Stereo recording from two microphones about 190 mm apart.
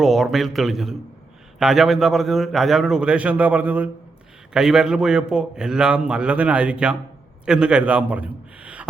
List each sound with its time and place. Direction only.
0.0 s a man's voice: centre (ahead or behind)